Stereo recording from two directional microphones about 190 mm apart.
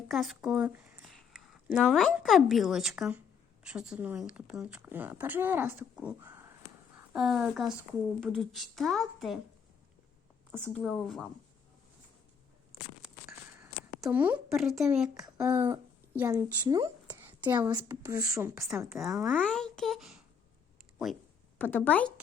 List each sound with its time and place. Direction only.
0.1 s a woman's voice: centre (ahead or behind)
10.7 s speech: 5° left (ahead or behind)
13.6 s a woman's voice: 10° right (ahead or behind)
17.4 s a woman's voice: 10° right (ahead or behind)
18.9 s speech: centre (ahead or behind)
21.6 s speech: 10° left (ahead or behind)